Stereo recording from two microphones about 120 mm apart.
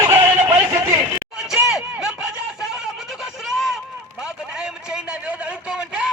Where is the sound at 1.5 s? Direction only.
5° right (ahead or behind).